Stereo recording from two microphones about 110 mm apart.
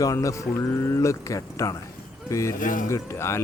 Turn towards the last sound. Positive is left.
turn(degrees=25)  # may be behind; listen again after turning